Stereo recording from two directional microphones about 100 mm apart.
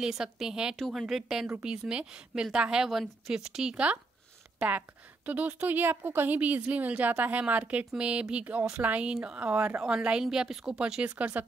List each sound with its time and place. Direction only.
0.0 s a woman's voice: 5° right (ahead or behind)